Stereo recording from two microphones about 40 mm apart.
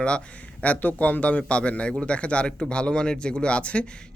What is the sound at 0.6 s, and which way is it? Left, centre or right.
Speech, left.